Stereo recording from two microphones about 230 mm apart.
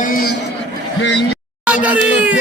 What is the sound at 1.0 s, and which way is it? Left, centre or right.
Speech, left.